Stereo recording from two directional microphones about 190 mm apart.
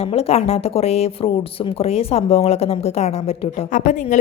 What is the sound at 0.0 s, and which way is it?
A woman's voice, 30° left (ahead or behind).